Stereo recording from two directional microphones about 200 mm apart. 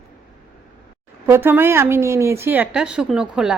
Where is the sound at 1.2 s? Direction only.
10° right (ahead or behind).